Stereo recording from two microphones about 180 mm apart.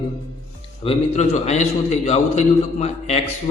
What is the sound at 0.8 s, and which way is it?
A man's voice, 35° left (ahead or behind).